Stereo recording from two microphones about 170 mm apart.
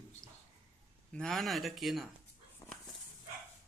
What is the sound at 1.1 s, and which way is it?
Speech, 5° left (ahead or behind).